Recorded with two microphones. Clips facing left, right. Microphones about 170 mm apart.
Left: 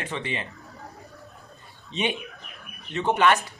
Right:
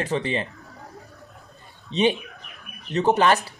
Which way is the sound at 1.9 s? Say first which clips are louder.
Right 7 dB; 35° right (ahead or behind).